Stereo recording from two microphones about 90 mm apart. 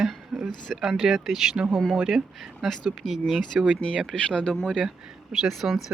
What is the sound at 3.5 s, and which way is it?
Speech, 10° right (ahead or behind).